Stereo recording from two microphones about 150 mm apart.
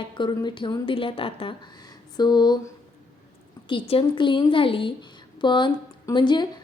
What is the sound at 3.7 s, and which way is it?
Speech, 35° left (ahead or behind).